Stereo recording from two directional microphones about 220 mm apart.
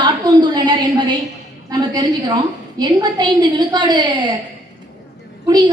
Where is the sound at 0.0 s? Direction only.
20° right (ahead or behind).